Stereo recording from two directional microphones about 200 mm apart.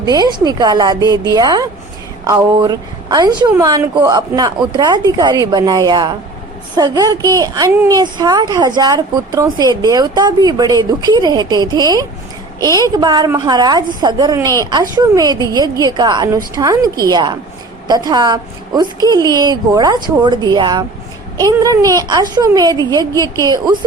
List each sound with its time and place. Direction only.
0.0 s a woman's voice: 20° right (ahead or behind)